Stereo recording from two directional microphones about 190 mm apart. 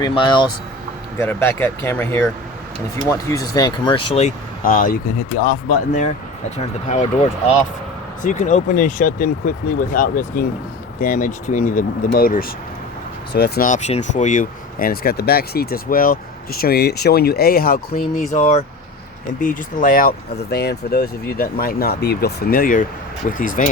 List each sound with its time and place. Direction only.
0.0 s speech: 25° left (ahead or behind)
1.2 s speech: 10° left (ahead or behind); by 4.3 s 30° left (ahead or behind)
4.6 s speech: 45° left (ahead or behind)
8.2 s speech: 40° left (ahead or behind)